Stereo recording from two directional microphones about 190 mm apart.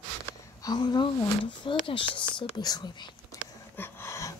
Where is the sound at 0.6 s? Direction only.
20° left (ahead or behind).